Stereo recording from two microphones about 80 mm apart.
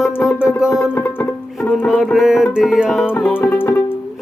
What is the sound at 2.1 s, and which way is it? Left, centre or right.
Music, centre.